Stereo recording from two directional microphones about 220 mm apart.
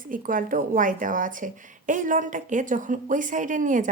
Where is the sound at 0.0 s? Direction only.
40° right (ahead or behind).